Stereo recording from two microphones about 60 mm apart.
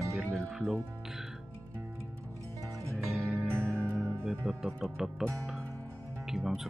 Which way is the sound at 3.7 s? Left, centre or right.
Right.